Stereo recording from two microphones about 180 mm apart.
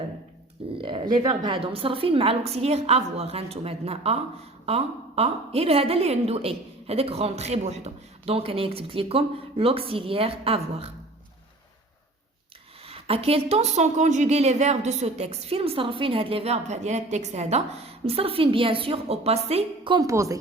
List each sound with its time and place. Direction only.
0.8 s a woman's voice: 25° right (ahead or behind)
12.9 s a woman's voice: 30° right (ahead or behind); by 20.4 s 15° right (ahead or behind)